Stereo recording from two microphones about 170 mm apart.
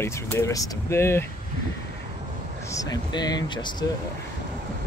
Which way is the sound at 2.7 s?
20° left (ahead or behind).